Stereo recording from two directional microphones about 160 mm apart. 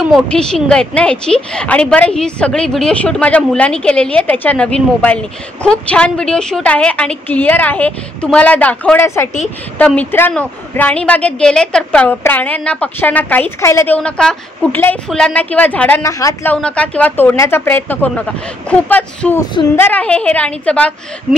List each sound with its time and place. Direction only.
0.3 s a woman's voice: 5° left (ahead or behind)
16.1 s a woman's voice: 20° left (ahead or behind)
16.6 s a woman's voice: 10° left (ahead or behind)